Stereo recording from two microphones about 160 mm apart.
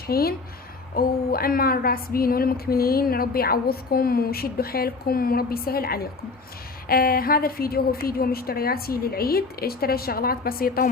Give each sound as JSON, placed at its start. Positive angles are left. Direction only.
{"t": 0.1, "sound": "a woman's voice", "side_deg": 70}